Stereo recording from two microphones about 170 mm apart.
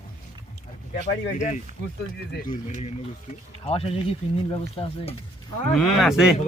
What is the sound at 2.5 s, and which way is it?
Speech, 45° left (ahead or behind).